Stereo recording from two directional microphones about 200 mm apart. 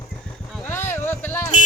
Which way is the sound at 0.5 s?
10° left (ahead or behind).